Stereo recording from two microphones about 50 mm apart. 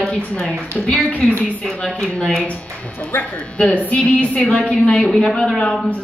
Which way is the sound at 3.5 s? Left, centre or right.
Left.